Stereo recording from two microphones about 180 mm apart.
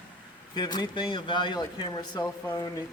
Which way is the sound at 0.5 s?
25° left (ahead or behind).